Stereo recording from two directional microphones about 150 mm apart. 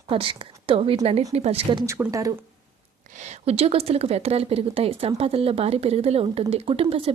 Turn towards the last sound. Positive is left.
turn(degrees=-40)  # may be behind; listen again after turning